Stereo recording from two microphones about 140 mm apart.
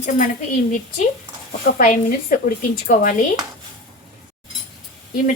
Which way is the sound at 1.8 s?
85° left.